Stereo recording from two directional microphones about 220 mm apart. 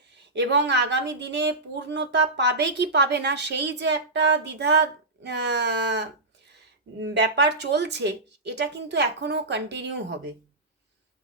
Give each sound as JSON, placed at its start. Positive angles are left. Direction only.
{"t": 0.2, "sound": "a woman's voice", "side_deg": -50}